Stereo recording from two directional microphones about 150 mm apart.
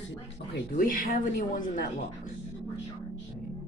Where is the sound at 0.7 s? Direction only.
65° left (ahead or behind).